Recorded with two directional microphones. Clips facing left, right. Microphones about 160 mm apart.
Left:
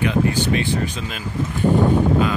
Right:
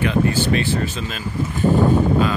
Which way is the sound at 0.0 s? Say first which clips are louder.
Right 1 dB; 15° left (ahead or behind).